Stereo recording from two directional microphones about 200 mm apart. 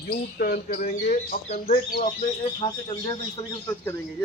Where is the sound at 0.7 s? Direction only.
35° left (ahead or behind).